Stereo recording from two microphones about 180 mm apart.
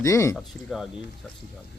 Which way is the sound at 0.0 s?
20° left (ahead or behind).